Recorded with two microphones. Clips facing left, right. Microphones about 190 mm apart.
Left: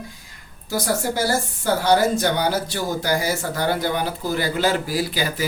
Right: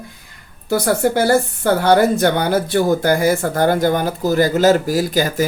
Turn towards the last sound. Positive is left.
turn(degrees=-45)  # may be behind; listen again after turning